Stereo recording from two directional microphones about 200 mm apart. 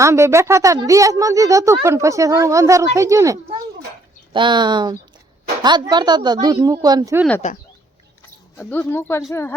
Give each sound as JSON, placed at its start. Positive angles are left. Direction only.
{"t": 0.0, "sound": "speech", "side_deg": -15}
{"t": 8.5, "sound": "speech", "side_deg": 10}